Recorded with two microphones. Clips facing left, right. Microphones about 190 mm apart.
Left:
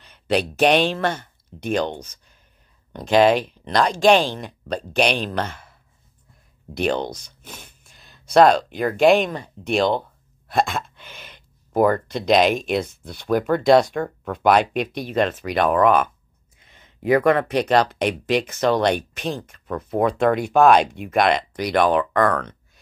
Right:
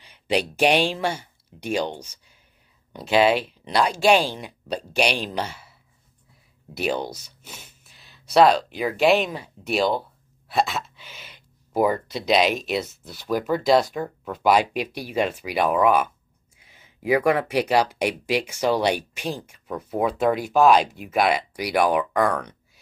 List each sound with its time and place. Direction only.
0.0 s speech: 10° right (ahead or behind)
5.5 s speech: 50° left (ahead or behind)
6.7 s speech: 5° right (ahead or behind)
7.4 s gasp: 50° left (ahead or behind)
7.8 s speech: centre (ahead or behind)
10.5 s a sound: 5° right (ahead or behind)
11.0 s a sound: 50° left (ahead or behind)
11.8 s speech: 5° right (ahead or behind)
12.2 s speech: 45° left (ahead or behind)
13.0 s speech: 5° right (ahead or behind)